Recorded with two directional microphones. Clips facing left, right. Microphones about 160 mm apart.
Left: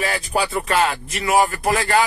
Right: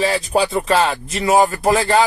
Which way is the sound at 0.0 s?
25° right (ahead or behind).